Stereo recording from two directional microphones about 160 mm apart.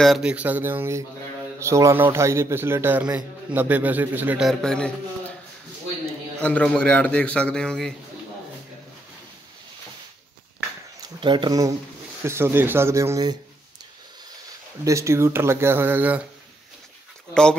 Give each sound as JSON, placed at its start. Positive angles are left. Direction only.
{"t": 0.0, "sound": "a man's voice", "side_deg": -5}
{"t": 6.4, "sound": "a man's voice", "side_deg": 5}
{"t": 11.0, "sound": "a man's voice", "side_deg": -30}
{"t": 14.9, "sound": "a man's voice", "side_deg": -20}
{"t": 17.3, "sound": "speech", "side_deg": 5}